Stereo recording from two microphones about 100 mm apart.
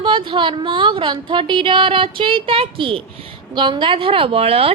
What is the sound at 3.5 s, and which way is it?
A woman's voice, 50° right (ahead or behind).